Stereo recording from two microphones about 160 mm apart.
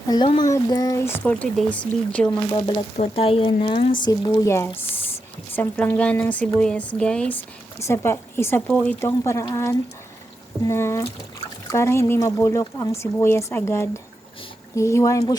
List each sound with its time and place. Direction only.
0.1 s speech: 30° left (ahead or behind); by 2.4 s 5° left (ahead or behind)
2.5 s speech: 30° left (ahead or behind)